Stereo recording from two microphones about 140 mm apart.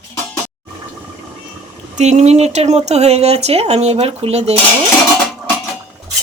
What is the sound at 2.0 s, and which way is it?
Speech, 55° right (ahead or behind).